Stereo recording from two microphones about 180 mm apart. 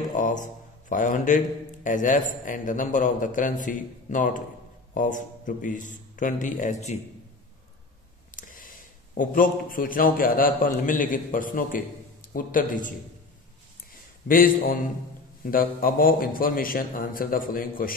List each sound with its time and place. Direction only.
0.1 s a man's voice: 45° left (ahead or behind)
8.4 s a man's voice: 50° left (ahead or behind)
14.2 s a man's voice: 50° left (ahead or behind)